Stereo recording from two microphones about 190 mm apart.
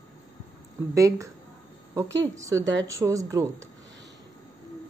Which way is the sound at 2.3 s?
15° right (ahead or behind).